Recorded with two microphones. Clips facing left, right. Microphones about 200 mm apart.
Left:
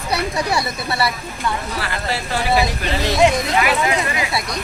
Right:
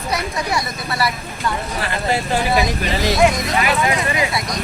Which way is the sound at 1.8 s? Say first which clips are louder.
Right 3 dB; 20° right (ahead or behind).